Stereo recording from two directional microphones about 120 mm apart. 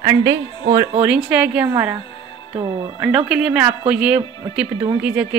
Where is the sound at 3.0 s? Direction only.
5° right (ahead or behind).